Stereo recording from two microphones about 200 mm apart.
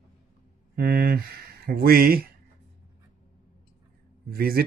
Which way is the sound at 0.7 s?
50° right (ahead or behind).